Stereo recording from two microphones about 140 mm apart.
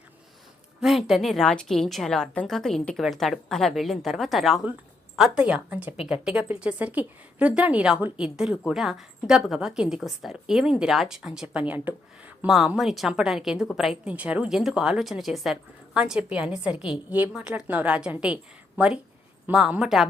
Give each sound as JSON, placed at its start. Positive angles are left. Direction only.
{"t": 0.8, "sound": "a woman's voice", "side_deg": 0}
{"t": 19.5, "sound": "a woman's voice", "side_deg": -5}